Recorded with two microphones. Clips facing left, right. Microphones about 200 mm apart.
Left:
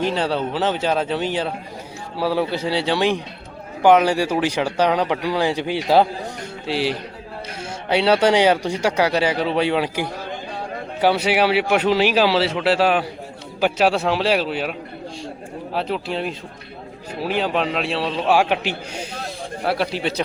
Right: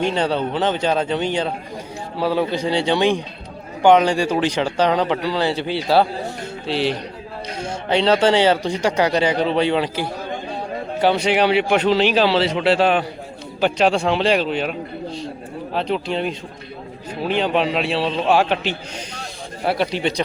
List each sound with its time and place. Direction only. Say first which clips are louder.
0.1 s a man's voice: right 1 dB; 5° left (ahead or behind)